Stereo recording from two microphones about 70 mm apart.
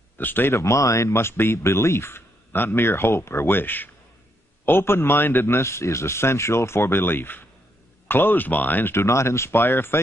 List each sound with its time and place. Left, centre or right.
0.2 s speech: left
0.6 s speech: left
8.9 s speech: left